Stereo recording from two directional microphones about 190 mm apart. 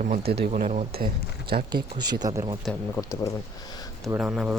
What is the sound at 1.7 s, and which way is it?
Speech, 25° right (ahead or behind).